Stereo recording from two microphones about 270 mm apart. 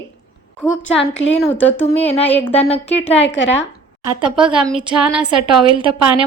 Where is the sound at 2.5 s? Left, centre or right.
Left.